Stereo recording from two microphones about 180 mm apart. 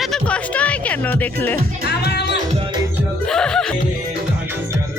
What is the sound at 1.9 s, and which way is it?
Music, 65° left (ahead or behind).